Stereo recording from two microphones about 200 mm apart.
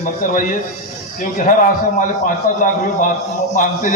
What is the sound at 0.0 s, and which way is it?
A man's voice, 45° left (ahead or behind).